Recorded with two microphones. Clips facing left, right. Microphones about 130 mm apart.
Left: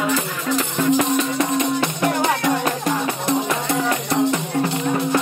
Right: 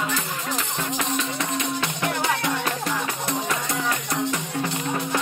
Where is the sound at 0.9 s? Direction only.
45° left (ahead or behind).